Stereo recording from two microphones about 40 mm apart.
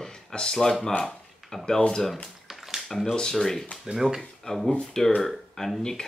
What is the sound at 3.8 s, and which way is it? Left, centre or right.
Speech, centre.